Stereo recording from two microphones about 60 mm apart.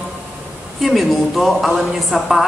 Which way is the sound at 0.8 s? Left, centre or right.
Centre.